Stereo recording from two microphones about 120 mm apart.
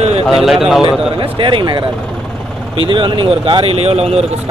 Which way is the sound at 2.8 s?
45° right (ahead or behind).